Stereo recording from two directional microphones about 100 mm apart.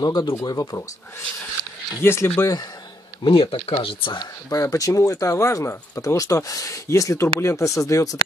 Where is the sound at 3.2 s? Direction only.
65° left (ahead or behind).